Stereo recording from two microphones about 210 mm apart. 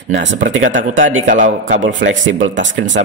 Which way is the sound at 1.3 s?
40° right (ahead or behind).